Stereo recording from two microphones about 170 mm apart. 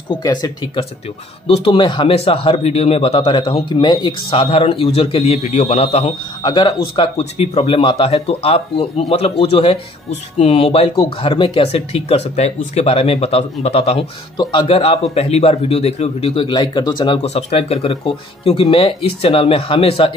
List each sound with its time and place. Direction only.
0.1 s speech: 25° left (ahead or behind)
6.4 s speech: 25° left (ahead or behind)
7.0 s speech: 35° left (ahead or behind)